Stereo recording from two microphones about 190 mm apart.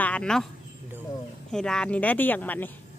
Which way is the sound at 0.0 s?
5° left (ahead or behind).